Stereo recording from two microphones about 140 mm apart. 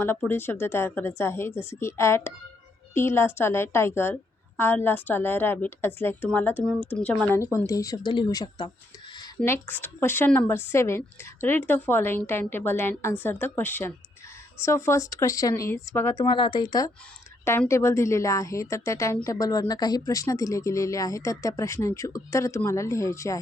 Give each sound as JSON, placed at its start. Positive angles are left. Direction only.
{"t": 0.0, "sound": "a woman's voice", "side_deg": 15}
{"t": 9.4, "sound": "a woman's voice", "side_deg": 15}
{"t": 16.1, "sound": "a woman's voice", "side_deg": 35}